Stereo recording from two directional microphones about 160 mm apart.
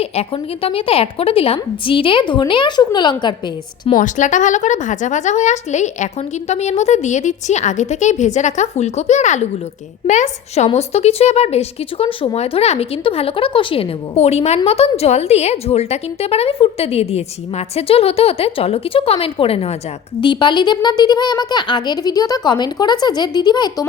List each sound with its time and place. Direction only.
0.0 s speech: 40° left (ahead or behind)
3.9 s a woman's voice: 50° left (ahead or behind); by 23.8 s 25° left (ahead or behind)